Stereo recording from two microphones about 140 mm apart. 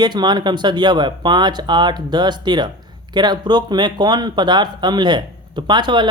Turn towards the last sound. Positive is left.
turn(degrees=-35)  # may be behind; listen again after turning